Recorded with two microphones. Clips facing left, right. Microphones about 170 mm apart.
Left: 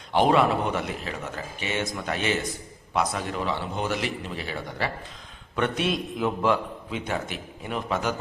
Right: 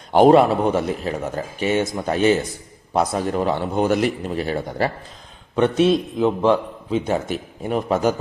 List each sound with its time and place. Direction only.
0.1 s a man's voice: 45° right (ahead or behind)
5.5 s a man's voice: 30° right (ahead or behind)